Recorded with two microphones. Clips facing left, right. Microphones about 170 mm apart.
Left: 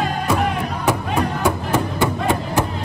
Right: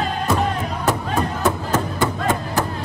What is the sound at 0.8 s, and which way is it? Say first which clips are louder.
Music: left 1 dB; 15° left (ahead or behind).